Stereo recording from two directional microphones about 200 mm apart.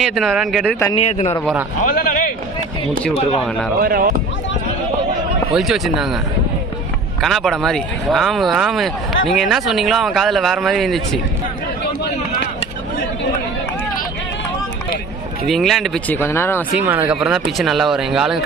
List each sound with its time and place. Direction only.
0.0 s speech: centre (ahead or behind)
0.9 s a man's voice: 30° left (ahead or behind)
1.9 s a man's voice: 45° left (ahead or behind)
3.8 s speech: 45° right (ahead or behind)
5.5 s speech: centre (ahead or behind)
7.2 s speech: centre (ahead or behind)
15.4 s speech: centre (ahead or behind)
16.8 s speech: 10° right (ahead or behind)